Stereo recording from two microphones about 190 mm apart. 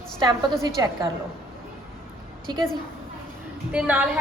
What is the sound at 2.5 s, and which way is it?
Speech, 20° right (ahead or behind).